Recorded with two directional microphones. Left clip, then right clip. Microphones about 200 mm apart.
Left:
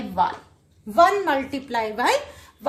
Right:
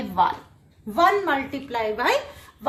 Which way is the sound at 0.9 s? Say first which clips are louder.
Left 2 dB; 50° left (ahead or behind).